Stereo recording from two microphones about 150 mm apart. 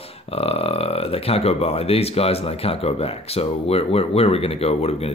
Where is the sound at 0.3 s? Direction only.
40° left (ahead or behind).